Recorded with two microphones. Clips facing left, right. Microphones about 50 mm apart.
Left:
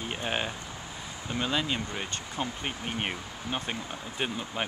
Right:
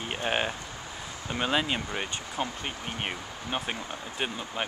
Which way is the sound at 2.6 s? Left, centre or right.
Centre.